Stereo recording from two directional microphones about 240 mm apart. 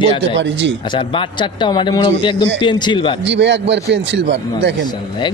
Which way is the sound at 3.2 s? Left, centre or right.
Right.